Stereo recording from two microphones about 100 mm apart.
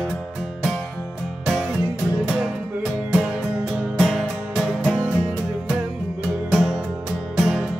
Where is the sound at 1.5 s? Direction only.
5° right (ahead or behind).